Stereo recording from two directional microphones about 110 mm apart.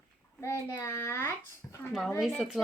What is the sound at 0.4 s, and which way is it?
A child's voice, 25° left (ahead or behind).